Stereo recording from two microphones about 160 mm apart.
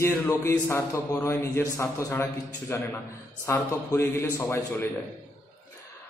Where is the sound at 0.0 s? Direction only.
15° left (ahead or behind).